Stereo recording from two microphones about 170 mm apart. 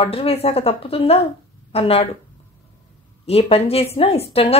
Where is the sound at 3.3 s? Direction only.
35° left (ahead or behind).